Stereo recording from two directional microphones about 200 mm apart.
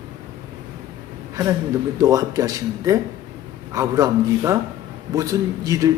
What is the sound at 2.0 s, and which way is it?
A man's voice, 15° right (ahead or behind).